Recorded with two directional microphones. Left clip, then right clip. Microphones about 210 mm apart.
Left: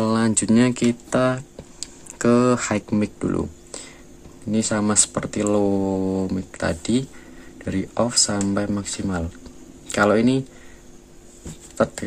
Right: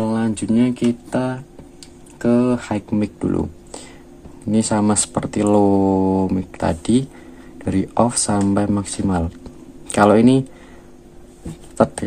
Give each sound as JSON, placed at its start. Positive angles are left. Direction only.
{"t": 0.0, "sound": "speech", "side_deg": 20}
{"t": 11.7, "sound": "speech", "side_deg": 0}